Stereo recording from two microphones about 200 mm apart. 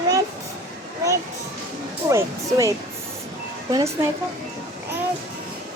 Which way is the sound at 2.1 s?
15° right (ahead or behind).